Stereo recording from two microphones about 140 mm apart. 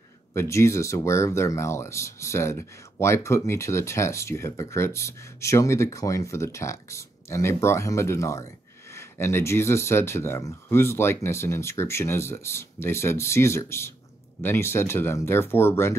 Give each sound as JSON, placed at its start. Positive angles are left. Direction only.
{"t": 0.3, "sound": "speech", "side_deg": 20}